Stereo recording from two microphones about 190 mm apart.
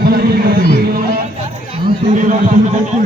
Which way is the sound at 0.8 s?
50° right (ahead or behind).